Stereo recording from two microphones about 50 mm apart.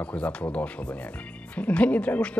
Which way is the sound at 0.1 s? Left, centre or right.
Left.